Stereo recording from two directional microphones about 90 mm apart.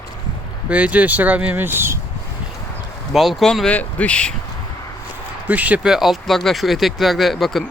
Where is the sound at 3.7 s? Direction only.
15° left (ahead or behind).